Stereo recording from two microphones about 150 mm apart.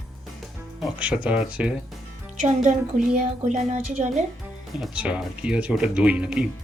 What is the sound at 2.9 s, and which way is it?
A woman's voice, 60° right (ahead or behind).